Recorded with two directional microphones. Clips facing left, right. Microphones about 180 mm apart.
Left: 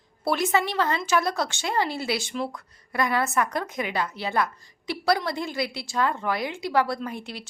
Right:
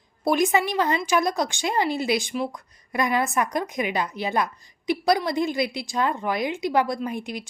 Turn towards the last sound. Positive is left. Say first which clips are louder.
# right 4 dB
turn(degrees=-15)  # may be behind; listen again after turning